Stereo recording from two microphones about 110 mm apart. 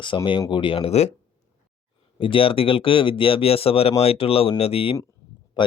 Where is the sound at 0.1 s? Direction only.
45° left (ahead or behind); by 1.1 s 75° left (ahead or behind).